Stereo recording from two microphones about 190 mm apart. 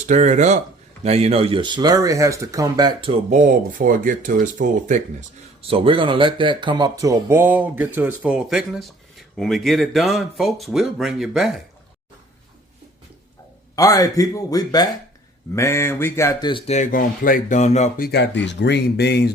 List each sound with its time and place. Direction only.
0.0 s speech: 40° right (ahead or behind)
3.2 s speech: 40° right (ahead or behind)
5.6 s speech: 30° right (ahead or behind); by 11.6 s centre (ahead or behind)
13.7 s speech: 20° left (ahead or behind); by 19.3 s 60° left (ahead or behind)